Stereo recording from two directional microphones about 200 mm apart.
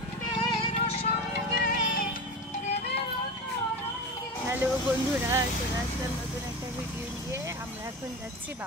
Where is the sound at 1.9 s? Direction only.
45° left (ahead or behind).